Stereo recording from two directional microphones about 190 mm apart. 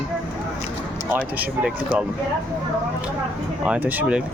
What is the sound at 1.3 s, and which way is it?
Speech, 10° right (ahead or behind).